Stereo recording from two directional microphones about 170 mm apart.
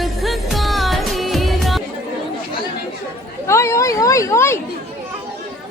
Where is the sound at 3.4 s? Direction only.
15° left (ahead or behind).